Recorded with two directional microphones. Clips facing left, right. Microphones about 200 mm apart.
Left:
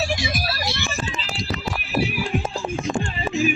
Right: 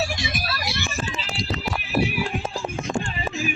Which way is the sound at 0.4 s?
35° left (ahead or behind).